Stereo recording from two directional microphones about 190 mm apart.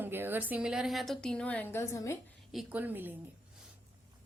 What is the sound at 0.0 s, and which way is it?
A woman's voice, 10° right (ahead or behind).